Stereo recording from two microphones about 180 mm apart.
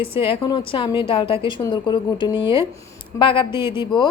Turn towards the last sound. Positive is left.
turn(degrees=25)  # may be behind; listen again after turning